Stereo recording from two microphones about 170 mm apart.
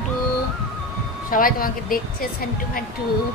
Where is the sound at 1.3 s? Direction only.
55° left (ahead or behind).